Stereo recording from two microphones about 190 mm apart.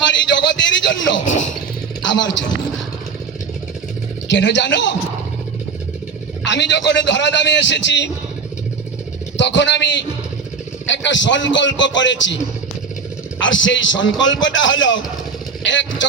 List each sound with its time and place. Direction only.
0.0 s a man's voice: 75° left (ahead or behind)
4.3 s a man's voice: 65° left (ahead or behind)
6.4 s a man's voice: 65° left (ahead or behind)
9.4 s a man's voice: 70° left (ahead or behind)
13.4 s a man's voice: 80° left